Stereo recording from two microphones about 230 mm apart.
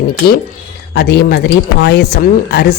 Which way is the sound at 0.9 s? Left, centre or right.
Left.